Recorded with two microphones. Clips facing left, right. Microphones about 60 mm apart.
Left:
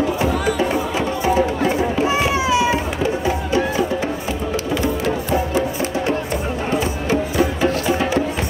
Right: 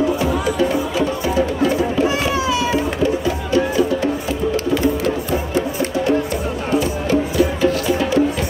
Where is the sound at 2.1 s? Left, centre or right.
Left.